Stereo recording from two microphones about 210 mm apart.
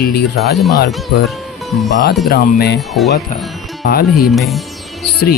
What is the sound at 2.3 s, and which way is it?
Speech, 50° left (ahead or behind).